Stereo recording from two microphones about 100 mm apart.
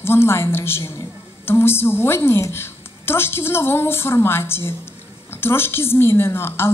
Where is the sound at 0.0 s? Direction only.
25° left (ahead or behind).